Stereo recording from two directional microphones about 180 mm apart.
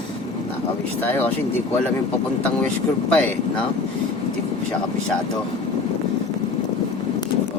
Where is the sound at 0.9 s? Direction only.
10° left (ahead or behind).